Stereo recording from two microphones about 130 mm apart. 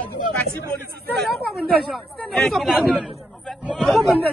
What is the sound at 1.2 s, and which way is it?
Speech, centre (ahead or behind).